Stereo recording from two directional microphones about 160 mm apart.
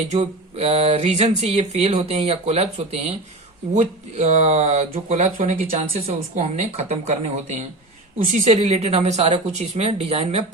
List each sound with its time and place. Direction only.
0.1 s speech: 40° right (ahead or behind)